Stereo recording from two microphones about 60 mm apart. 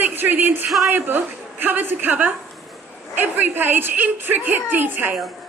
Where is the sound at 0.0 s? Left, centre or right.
Right.